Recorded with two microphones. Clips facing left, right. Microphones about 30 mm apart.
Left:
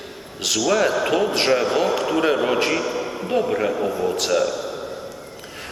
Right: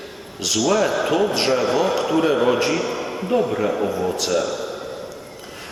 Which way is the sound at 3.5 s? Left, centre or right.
Left.